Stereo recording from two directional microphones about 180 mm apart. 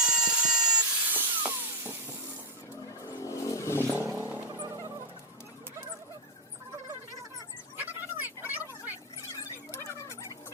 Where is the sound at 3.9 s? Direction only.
15° right (ahead or behind).